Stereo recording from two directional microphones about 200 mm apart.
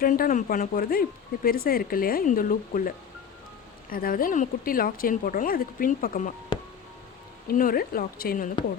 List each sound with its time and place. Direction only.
0.0 s speech: 45° left (ahead or behind)
7.4 s speech: 45° left (ahead or behind)